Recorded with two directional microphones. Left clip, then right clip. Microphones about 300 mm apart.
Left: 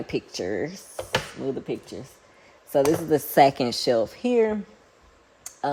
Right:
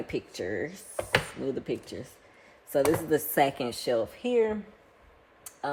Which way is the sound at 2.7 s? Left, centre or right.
Left.